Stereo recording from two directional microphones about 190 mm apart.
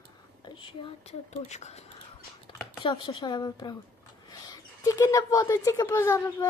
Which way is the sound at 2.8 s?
25° left (ahead or behind).